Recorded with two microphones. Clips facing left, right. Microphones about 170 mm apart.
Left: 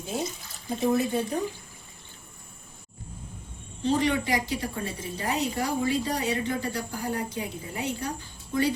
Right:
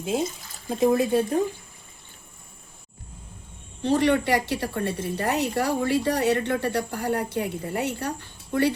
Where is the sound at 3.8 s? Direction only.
65° right (ahead or behind).